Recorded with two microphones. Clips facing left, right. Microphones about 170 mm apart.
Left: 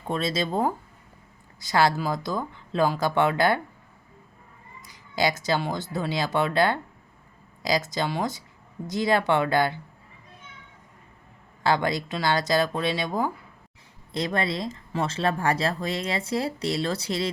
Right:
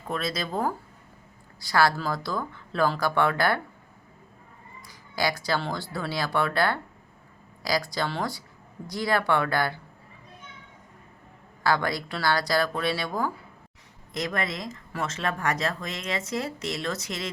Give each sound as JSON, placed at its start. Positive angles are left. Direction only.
{"t": 0.1, "sound": "speech", "side_deg": 25}
{"t": 4.9, "sound": "speech", "side_deg": 20}
{"t": 11.6, "sound": "speech", "side_deg": 20}